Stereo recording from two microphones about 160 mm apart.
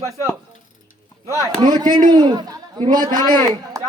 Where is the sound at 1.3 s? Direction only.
20° right (ahead or behind).